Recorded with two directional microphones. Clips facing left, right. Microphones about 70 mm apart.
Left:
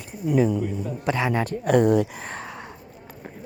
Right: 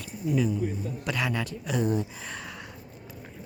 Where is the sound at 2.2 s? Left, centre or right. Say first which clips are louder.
Left 4 dB; left.